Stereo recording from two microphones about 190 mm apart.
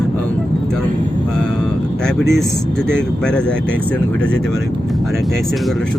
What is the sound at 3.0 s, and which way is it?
Speech, 5° left (ahead or behind).